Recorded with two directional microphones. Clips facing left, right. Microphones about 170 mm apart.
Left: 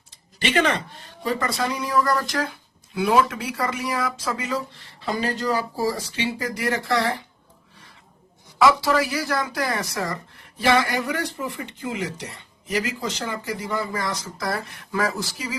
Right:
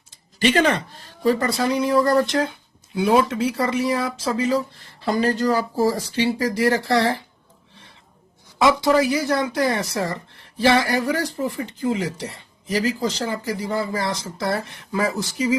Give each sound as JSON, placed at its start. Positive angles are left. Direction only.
{"t": 0.3, "sound": "speech", "side_deg": -40}
{"t": 8.8, "sound": "speech", "side_deg": -20}